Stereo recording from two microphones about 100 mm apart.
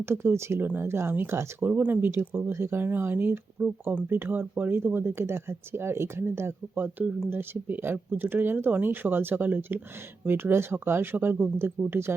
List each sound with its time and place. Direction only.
0.0 s speech: 25° right (ahead or behind)